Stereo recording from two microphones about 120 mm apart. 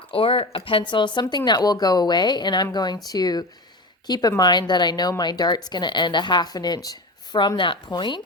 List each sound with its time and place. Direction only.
0.1 s a woman's voice: 50° left (ahead or behind)